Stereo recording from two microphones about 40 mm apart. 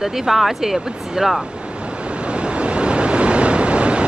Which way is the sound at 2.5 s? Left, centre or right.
Right.